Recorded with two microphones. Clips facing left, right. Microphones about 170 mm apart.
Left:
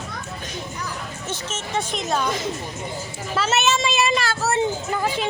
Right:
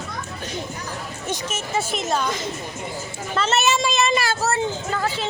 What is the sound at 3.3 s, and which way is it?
Speech, 5° left (ahead or behind).